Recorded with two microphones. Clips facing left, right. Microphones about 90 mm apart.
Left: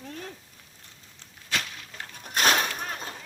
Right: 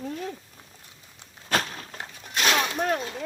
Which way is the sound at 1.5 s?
40° right (ahead or behind).